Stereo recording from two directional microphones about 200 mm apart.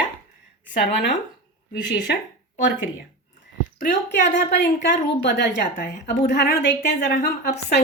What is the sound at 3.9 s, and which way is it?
A woman's voice, 60° left (ahead or behind).